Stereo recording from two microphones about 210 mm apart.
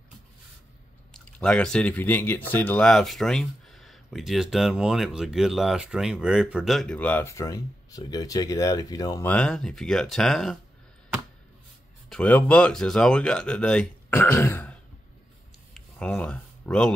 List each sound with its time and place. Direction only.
1.1 s speech: 5° left (ahead or behind)
12.1 s speech: 5° left (ahead or behind)
15.7 s a sound: 5° left (ahead or behind)